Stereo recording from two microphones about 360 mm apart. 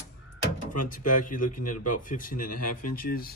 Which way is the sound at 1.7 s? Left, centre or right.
Left.